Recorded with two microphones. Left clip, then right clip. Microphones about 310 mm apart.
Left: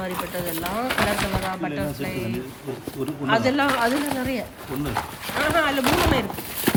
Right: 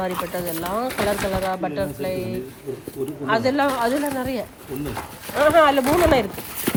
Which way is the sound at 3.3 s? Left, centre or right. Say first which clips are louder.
Right 1 dB; centre.